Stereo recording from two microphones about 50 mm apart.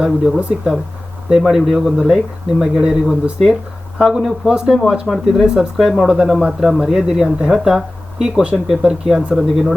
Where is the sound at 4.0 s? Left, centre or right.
Centre.